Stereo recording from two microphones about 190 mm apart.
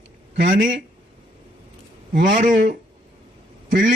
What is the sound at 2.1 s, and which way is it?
Speech, 45° right (ahead or behind).